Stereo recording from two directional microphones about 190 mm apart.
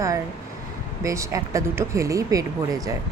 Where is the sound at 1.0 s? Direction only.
15° right (ahead or behind).